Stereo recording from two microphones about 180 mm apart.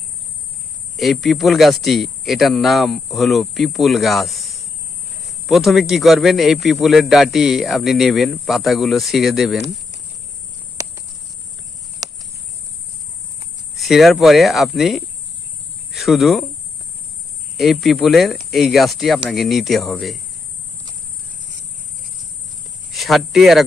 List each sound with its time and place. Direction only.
0.9 s a man's voice: centre (ahead or behind)
12.0 s a sound: 20° right (ahead or behind)
13.7 s a man's voice: centre (ahead or behind)
17.6 s a man's voice: centre (ahead or behind)
22.9 s a man's voice: centre (ahead or behind)